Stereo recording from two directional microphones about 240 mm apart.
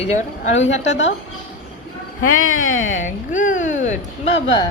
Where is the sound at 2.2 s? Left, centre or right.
Left.